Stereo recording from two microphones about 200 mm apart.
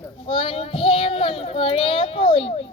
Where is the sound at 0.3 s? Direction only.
25° left (ahead or behind).